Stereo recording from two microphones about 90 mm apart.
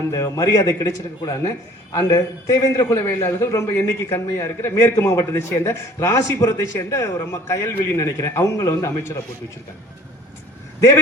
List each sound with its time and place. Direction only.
0.1 s a man's voice: 40° left (ahead or behind)